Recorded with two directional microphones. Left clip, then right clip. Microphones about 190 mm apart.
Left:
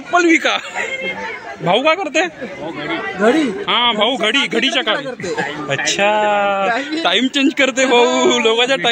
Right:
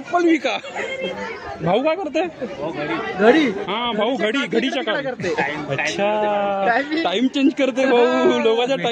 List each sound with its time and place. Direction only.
0.1 s speech: 5° left (ahead or behind)
1.7 s speech: centre (ahead or behind)
3.6 s a man's voice: centre (ahead or behind)
7.9 s speech: 35° left (ahead or behind)
8.3 s speech: centre (ahead or behind)